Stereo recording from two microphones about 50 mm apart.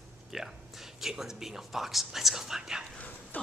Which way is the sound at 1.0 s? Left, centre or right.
Centre.